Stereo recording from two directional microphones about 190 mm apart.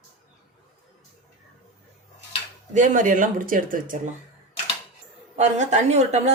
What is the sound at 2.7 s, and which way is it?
Speech, 40° right (ahead or behind).